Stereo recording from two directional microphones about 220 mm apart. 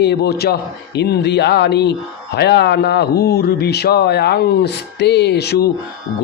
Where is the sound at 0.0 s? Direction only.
50° left (ahead or behind).